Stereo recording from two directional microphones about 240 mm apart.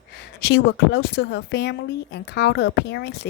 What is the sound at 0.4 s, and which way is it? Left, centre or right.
Speech, left.